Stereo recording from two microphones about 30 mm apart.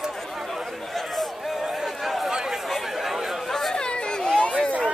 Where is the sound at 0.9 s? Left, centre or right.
Centre.